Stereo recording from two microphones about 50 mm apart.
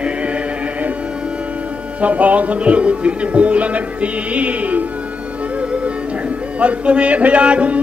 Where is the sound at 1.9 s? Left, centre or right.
Right.